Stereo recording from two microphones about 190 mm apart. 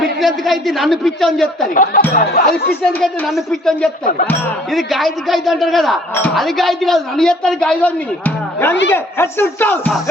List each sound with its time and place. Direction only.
0.0 s a man's voice: centre (ahead or behind)
1.7 s speech: 45° left (ahead or behind)
3.0 s a man's voice: centre (ahead or behind)